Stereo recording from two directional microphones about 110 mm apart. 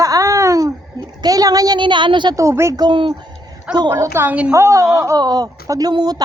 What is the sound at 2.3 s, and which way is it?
Speech, 25° right (ahead or behind).